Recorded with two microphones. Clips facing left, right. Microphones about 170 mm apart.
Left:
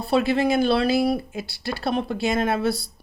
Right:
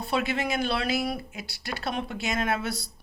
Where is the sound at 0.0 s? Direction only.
35° left (ahead or behind).